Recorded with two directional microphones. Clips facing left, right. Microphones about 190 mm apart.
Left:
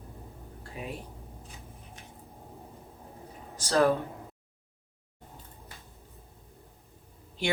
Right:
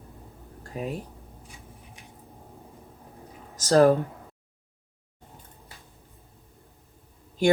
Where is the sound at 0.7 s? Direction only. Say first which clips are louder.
Right 7 dB; 40° right (ahead or behind).